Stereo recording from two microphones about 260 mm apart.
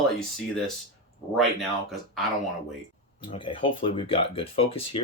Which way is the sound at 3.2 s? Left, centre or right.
Centre.